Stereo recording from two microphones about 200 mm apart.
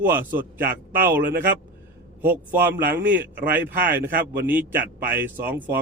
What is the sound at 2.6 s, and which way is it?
A man's voice, 10° right (ahead or behind).